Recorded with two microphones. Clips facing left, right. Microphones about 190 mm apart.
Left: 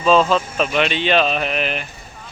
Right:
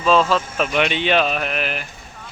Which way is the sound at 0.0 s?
Centre (ahead or behind).